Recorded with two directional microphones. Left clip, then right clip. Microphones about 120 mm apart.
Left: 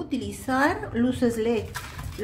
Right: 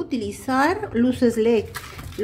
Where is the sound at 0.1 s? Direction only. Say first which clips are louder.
Right 2 dB; 30° right (ahead or behind).